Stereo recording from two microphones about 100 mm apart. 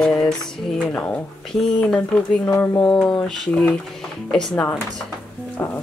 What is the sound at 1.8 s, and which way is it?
Speech, 10° left (ahead or behind).